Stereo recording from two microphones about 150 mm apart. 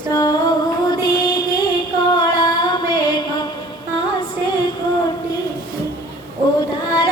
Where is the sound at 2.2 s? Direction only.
30° left (ahead or behind).